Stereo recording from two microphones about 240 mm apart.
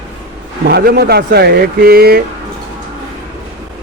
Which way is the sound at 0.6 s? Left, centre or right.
Right.